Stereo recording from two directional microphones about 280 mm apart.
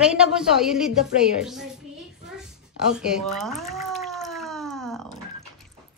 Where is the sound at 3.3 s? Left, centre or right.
Centre.